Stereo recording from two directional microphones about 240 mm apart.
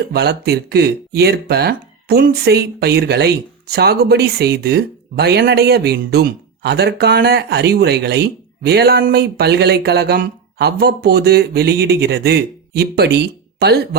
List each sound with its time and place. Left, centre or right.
0.0 s speech: right